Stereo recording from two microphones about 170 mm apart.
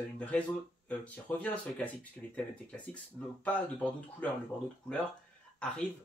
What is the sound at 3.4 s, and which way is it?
Speech, 10° left (ahead or behind).